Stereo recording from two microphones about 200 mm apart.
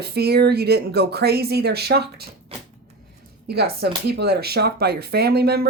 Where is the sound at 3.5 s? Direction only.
55° right (ahead or behind).